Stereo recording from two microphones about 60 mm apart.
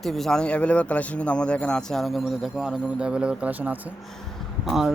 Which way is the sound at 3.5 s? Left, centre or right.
Right.